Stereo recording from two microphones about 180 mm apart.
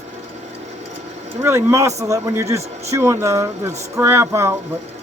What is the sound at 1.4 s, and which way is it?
Speech, 15° right (ahead or behind).